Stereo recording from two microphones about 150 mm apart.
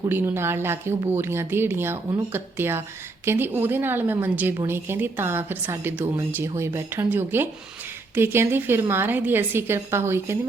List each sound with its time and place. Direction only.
0.1 s a woman's voice: 15° right (ahead or behind)